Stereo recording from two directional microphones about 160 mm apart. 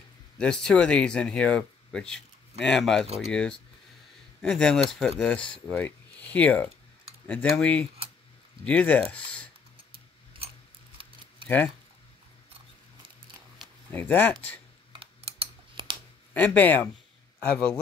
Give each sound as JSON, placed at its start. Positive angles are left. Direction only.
{"t": 0.4, "sound": "speech", "side_deg": 5}
{"t": 11.4, "sound": "speech", "side_deg": 10}
{"t": 13.9, "sound": "speech", "side_deg": 10}
{"t": 14.9, "sound": "typing", "side_deg": -35}
{"t": 16.3, "sound": "speech", "side_deg": 10}